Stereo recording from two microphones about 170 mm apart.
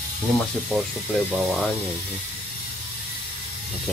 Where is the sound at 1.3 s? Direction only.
Centre (ahead or behind).